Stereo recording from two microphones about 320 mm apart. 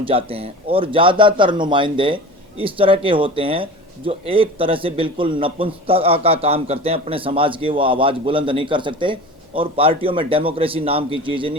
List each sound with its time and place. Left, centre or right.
0.0 s speech: centre